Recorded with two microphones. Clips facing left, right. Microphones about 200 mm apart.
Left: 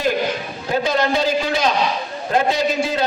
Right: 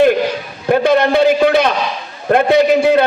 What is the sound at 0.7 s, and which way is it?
A man's voice, 60° right (ahead or behind).